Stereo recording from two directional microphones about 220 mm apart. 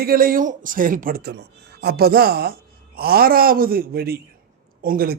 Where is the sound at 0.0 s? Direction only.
40° right (ahead or behind).